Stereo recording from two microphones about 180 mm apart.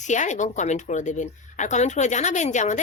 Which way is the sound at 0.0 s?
40° left (ahead or behind).